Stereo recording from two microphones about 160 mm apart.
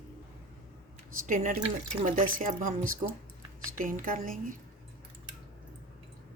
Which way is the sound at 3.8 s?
60° right (ahead or behind).